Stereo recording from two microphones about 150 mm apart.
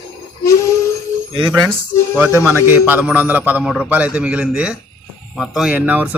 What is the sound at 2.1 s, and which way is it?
A man's voice, 10° right (ahead or behind).